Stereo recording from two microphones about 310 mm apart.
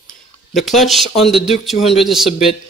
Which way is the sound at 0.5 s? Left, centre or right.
Centre.